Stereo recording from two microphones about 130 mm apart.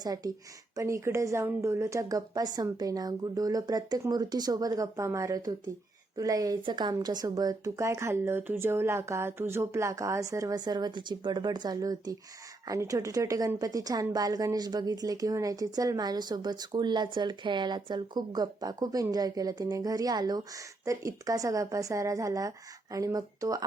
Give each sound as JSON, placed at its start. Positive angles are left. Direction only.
{"t": 0.0, "sound": "a woman's voice", "side_deg": -30}